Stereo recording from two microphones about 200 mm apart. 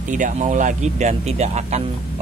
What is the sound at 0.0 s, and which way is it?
Speech, 40° right (ahead or behind).